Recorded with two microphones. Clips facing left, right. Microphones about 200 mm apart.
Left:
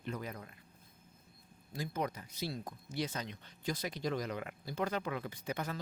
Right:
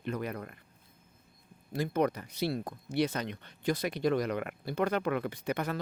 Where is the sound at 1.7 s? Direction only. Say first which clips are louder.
Right 9 dB; 65° right (ahead or behind).